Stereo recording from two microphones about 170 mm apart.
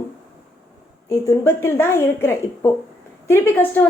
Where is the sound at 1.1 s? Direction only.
15° left (ahead or behind).